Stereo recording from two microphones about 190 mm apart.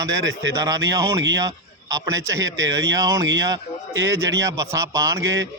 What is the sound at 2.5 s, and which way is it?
Speech, 90° right.